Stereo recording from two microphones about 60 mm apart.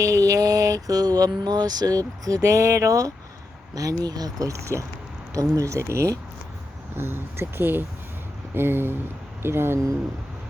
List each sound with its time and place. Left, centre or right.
0.0 s speech: right
3.8 s speech: right
5.3 s speech: right
6.9 s speech: right